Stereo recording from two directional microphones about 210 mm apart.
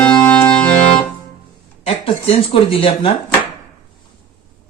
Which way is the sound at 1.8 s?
30° left (ahead or behind).